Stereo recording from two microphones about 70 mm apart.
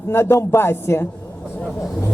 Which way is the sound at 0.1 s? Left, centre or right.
Left.